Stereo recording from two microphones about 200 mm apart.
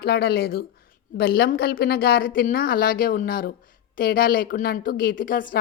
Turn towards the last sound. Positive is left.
turn(degrees=45)  # may be behind; listen again after turning